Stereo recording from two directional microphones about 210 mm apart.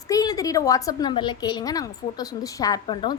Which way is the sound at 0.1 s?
15° left (ahead or behind).